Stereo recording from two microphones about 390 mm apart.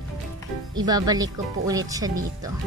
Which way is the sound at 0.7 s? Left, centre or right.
Centre.